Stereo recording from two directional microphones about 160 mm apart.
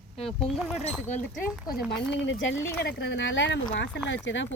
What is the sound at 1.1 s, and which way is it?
Speech, 45° left (ahead or behind).